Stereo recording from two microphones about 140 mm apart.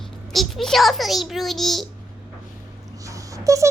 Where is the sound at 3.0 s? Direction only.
25° right (ahead or behind).